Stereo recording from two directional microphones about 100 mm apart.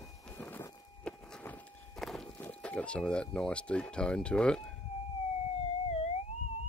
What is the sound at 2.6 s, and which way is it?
Speech, 10° left (ahead or behind).